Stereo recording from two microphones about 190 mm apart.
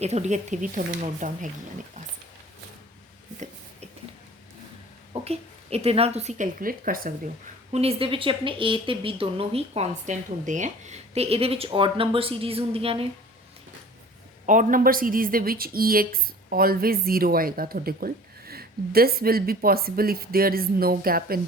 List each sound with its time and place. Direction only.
0.0 s speech: 35° right (ahead or behind)
5.1 s a woman's voice: 30° right (ahead or behind); by 7.1 s 50° right (ahead or behind)
7.7 s speech: 30° right (ahead or behind)
14.4 s a woman's voice: 40° right (ahead or behind)